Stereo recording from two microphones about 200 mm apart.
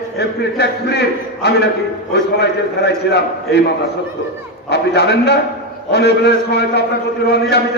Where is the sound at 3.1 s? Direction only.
55° left (ahead or behind).